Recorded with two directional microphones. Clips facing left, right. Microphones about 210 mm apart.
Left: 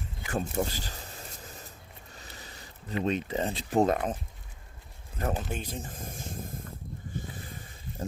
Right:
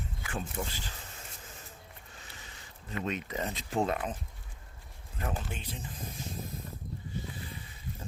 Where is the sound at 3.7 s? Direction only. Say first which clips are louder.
Left 6 dB; 40° left (ahead or behind).